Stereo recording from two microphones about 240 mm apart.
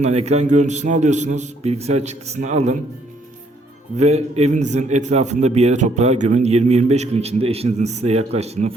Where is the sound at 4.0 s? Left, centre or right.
Right.